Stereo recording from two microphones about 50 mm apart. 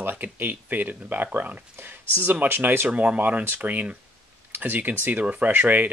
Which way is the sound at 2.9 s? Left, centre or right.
Right.